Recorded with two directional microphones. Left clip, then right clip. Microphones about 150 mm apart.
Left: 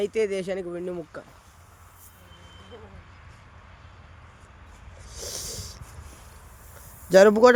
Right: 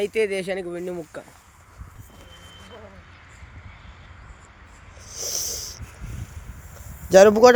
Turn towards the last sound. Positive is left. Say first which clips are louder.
# right 3 dB
turn(degrees=0)  # may be behind; listen again after turning